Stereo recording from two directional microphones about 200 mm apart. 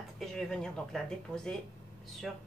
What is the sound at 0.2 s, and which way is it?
Speech, centre (ahead or behind).